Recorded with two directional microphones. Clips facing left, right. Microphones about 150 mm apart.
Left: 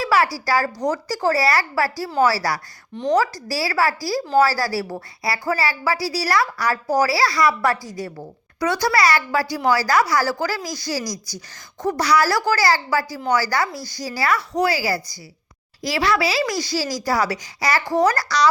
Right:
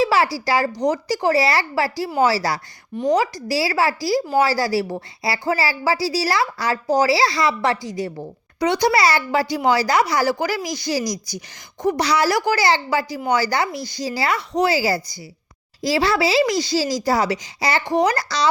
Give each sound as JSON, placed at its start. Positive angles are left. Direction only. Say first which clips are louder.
{"t": 0.0, "sound": "speech", "louder": "right 2 dB", "side_deg": -25}